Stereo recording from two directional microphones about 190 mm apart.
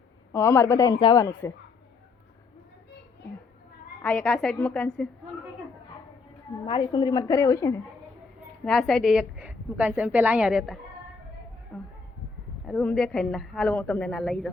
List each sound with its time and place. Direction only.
0.3 s a woman's voice: 15° left (ahead or behind)
4.0 s a woman's voice: 5° left (ahead or behind)
6.7 s a woman's voice: 25° left (ahead or behind)
8.6 s a woman's voice: centre (ahead or behind)